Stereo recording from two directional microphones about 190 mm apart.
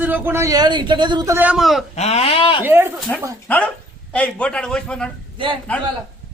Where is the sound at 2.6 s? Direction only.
10° right (ahead or behind).